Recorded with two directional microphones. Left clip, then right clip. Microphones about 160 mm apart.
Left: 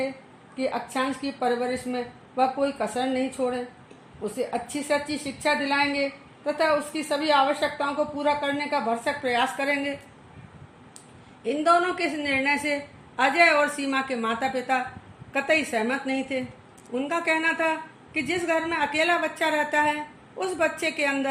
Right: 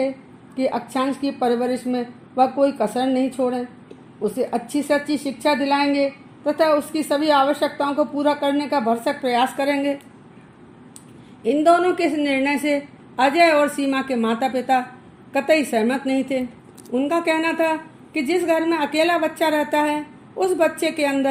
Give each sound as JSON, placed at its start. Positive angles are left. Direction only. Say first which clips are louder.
{"t": 0.5, "sound": "a woman's voice", "louder": "right 5 dB", "side_deg": -45}
{"t": 11.4, "sound": "a woman's voice", "louder": "right 5 dB", "side_deg": -40}